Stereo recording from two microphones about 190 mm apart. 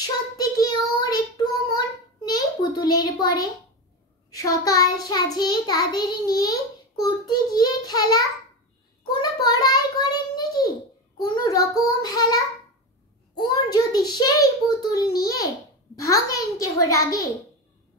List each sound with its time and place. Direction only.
0.0 s child singing: 20° left (ahead or behind)
9.2 s a sound: 20° left (ahead or behind)
11.2 s child singing: 20° left (ahead or behind)
13.4 s child singing: 20° left (ahead or behind)
16.0 s a child's voice: 15° left (ahead or behind)